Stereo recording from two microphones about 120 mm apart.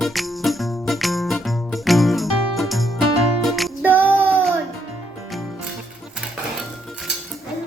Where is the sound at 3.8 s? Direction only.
15° right (ahead or behind).